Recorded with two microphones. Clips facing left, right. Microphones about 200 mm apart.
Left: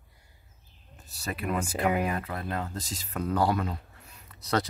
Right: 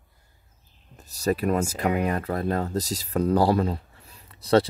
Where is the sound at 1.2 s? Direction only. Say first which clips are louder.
Right 8 dB; 40° right (ahead or behind).